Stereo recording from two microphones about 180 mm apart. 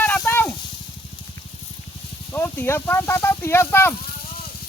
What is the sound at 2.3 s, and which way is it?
Speech, 10° left (ahead or behind).